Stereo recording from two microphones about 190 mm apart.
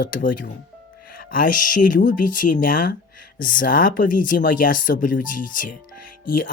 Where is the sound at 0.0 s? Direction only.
45° left (ahead or behind).